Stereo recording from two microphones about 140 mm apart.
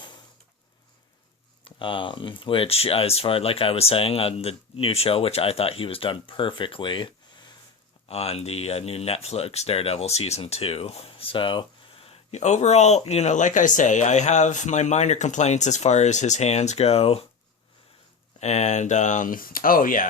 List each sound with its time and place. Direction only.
1.6 s speech: 35° left (ahead or behind)
8.0 s speech: 45° left (ahead or behind)
18.3 s speech: 55° left (ahead or behind); by 20.1 s 75° left (ahead or behind)